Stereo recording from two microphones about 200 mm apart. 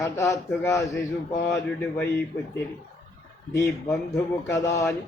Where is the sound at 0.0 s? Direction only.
15° left (ahead or behind).